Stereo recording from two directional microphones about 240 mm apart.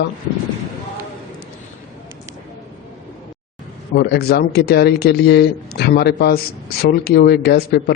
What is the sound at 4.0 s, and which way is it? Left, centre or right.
Speech, left.